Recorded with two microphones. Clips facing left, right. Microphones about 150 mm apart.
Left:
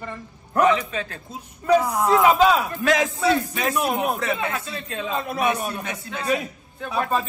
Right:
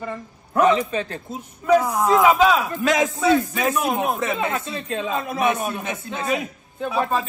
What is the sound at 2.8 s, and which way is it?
A man's voice, 20° right (ahead or behind).